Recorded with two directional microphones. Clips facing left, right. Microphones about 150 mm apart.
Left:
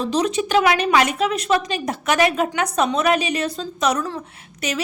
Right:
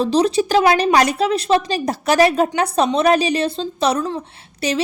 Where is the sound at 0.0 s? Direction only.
35° right (ahead or behind).